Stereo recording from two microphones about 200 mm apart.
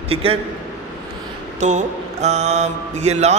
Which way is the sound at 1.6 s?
35° right (ahead or behind).